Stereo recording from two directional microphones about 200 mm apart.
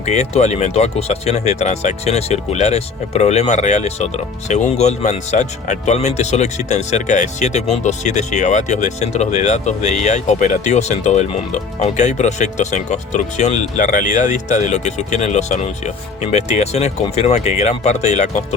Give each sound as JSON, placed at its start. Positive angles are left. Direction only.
{"t": 0.0, "sound": "speech", "side_deg": 35}